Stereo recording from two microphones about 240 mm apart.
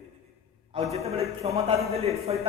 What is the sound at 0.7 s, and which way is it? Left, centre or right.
A man's voice, right.